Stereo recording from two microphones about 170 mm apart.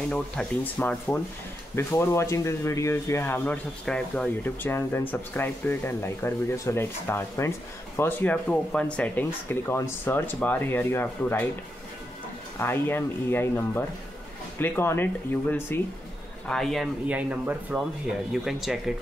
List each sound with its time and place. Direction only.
0.4 s speech: 5° left (ahead or behind)
12.5 s speech: 15° left (ahead or behind)
16.4 s speech: centre (ahead or behind)
17.1 s speech: 10° right (ahead or behind)